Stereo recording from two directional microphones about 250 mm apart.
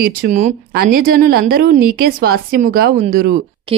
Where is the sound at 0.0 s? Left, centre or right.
Right.